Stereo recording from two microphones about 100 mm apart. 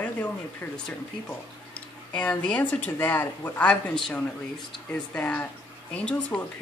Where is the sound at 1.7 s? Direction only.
10° left (ahead or behind).